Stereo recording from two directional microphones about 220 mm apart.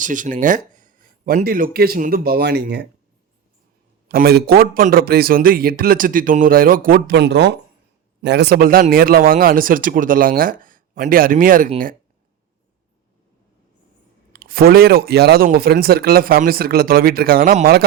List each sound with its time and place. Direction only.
0.0 s speech: 35° right (ahead or behind)
4.1 s speech: 45° right (ahead or behind)
14.3 s a man's voice: 40° right (ahead or behind)